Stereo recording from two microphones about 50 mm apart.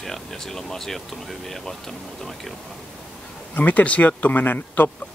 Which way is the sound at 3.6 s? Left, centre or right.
Left.